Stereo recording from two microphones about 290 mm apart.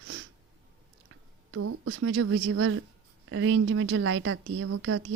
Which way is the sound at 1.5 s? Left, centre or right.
Right.